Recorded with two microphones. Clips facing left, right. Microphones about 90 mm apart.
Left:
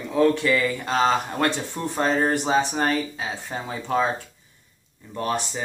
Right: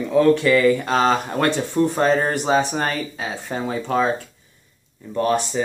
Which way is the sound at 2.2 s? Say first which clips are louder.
Right 2 dB; 15° left (ahead or behind).